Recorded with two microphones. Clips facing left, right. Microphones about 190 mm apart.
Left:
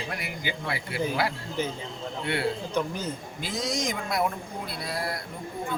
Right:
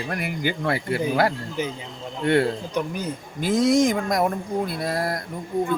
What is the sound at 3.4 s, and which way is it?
A man's voice, 50° right (ahead or behind).